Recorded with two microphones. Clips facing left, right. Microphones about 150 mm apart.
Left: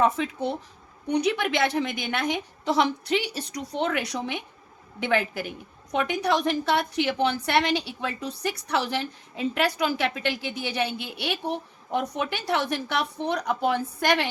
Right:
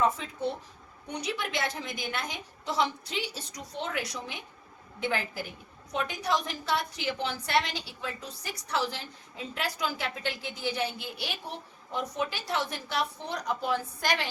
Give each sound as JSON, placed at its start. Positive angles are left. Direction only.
{"t": 0.0, "sound": "a woman's voice", "side_deg": 75}